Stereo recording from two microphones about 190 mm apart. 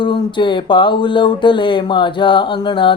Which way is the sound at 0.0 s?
25° left (ahead or behind).